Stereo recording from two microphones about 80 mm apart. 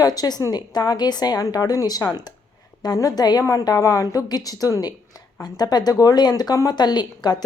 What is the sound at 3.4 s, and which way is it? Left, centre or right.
A woman's voice, left.